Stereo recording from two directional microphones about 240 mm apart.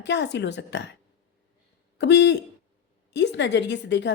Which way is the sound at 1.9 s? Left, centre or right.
Left.